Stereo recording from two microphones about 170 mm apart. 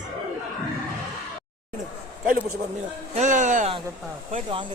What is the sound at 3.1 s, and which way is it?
Speech, 45° right (ahead or behind).